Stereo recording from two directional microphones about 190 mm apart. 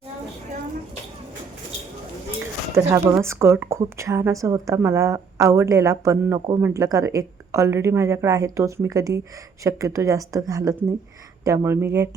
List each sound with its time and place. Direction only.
2.7 s a woman's voice: 15° right (ahead or behind)